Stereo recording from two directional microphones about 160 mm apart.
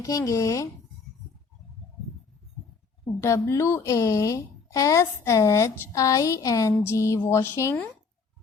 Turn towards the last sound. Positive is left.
turn(degrees=15)  # may be behind; listen again after turning